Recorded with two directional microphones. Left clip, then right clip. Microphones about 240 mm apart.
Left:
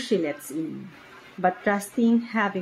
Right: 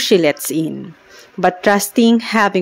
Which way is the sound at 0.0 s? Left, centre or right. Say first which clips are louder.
Right 13 dB; right.